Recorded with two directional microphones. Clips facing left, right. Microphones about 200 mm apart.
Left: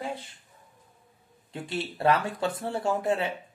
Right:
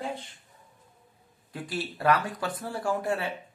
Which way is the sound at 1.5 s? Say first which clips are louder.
Left 1 dB; 25° left (ahead or behind).